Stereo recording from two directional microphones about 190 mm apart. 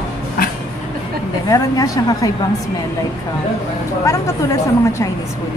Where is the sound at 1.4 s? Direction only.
20° left (ahead or behind).